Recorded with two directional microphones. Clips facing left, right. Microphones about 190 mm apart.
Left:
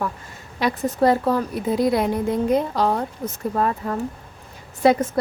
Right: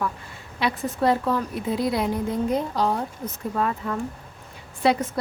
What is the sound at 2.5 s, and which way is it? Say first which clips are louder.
Speech: left 4 dB; 70° left (ahead or behind).